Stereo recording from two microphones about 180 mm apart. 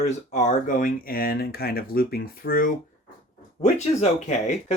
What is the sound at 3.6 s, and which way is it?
Speech, 40° left (ahead or behind).